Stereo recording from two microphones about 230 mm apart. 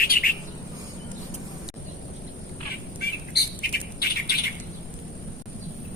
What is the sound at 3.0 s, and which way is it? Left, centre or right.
Bird, left.